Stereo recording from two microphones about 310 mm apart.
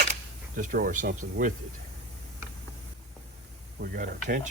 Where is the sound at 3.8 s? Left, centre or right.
Right.